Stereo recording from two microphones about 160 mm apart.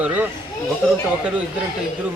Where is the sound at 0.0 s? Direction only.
10° right (ahead or behind).